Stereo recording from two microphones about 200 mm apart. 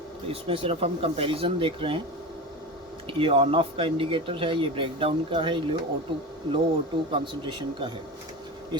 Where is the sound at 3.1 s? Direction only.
25° right (ahead or behind).